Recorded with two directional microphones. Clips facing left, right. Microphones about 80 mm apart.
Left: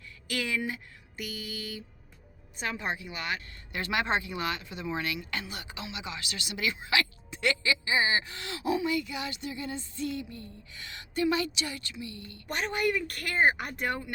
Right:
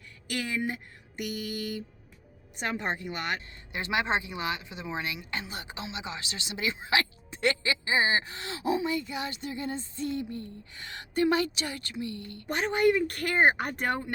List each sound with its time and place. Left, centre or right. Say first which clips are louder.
0.3 s speech: right 1 dB; right
1.1 s mantra: right 5 dB; right
3.7 s speech: right 1 dB; right
12.5 s speech: right 5 dB; right